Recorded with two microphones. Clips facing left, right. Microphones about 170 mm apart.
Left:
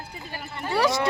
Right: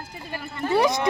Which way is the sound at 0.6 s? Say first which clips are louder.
Right 2 dB; 20° right (ahead or behind).